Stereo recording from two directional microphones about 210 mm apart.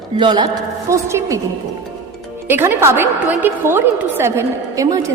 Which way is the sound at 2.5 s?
10° right (ahead or behind).